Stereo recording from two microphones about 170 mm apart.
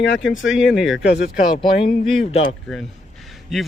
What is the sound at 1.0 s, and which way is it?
Speech, 80° left.